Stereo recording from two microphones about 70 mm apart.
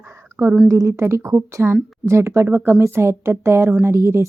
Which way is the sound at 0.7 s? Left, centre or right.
Right.